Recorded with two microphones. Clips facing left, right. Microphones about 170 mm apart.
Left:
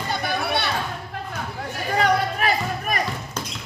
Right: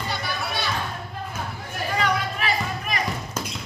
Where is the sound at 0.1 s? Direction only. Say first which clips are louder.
Left 8 dB; 55° left (ahead or behind).